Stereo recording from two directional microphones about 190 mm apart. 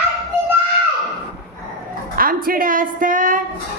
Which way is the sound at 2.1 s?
50° right (ahead or behind).